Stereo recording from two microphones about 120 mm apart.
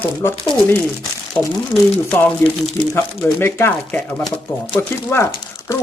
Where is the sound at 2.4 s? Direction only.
20° left (ahead or behind).